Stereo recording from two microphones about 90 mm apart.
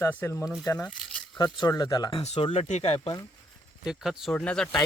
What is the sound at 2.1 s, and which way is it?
Speech, 85° left.